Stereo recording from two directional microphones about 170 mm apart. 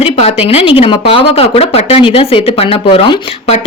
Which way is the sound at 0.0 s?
35° left (ahead or behind).